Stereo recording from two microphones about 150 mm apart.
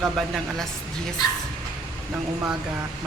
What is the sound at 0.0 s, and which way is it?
Speech, centre (ahead or behind).